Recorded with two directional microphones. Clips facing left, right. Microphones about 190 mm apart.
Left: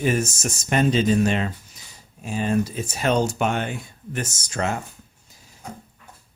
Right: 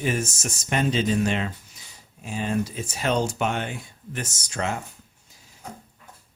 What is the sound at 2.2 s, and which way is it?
Speech, 45° left (ahead or behind).